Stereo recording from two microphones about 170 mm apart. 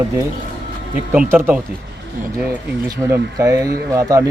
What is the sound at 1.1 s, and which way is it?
Speech, 10° right (ahead or behind).